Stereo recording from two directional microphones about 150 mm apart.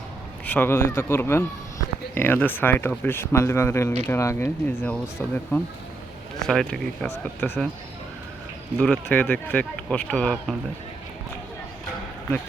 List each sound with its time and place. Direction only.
0.4 s speech: 15° left (ahead or behind)
8.8 s speech: 10° left (ahead or behind)